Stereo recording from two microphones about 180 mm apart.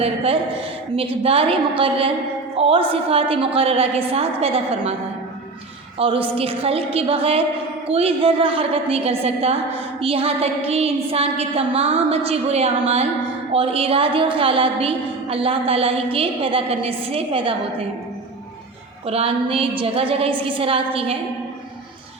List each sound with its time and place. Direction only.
0.9 s a woman's voice: 30° right (ahead or behind)
6.0 s a woman's voice: 30° right (ahead or behind)
19.0 s a woman's voice: 35° right (ahead or behind)